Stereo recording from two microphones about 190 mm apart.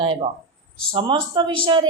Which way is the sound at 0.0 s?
30° right (ahead or behind).